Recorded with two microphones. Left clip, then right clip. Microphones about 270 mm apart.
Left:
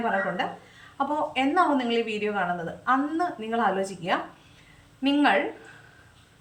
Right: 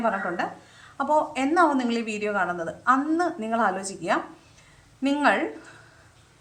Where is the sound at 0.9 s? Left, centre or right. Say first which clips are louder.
Right 3 dB; centre.